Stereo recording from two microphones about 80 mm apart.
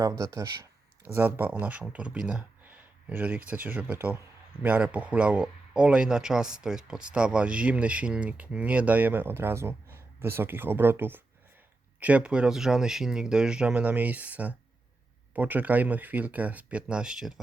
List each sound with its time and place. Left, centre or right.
0.0 s speech: right
1.0 s speech: right
2.6 s speech: right
11.9 s speech: centre